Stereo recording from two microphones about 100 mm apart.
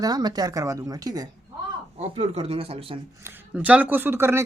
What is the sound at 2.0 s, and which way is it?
Speech, 90° right.